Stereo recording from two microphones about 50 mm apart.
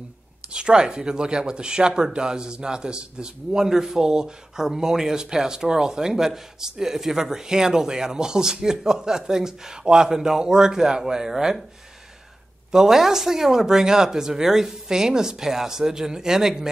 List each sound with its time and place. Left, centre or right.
0.5 s speech: centre
12.7 s speech: centre